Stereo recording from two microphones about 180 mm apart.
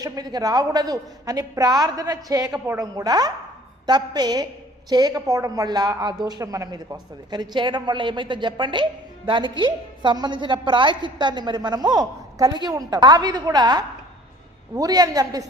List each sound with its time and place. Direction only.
0.0 s a woman's voice: 20° right (ahead or behind)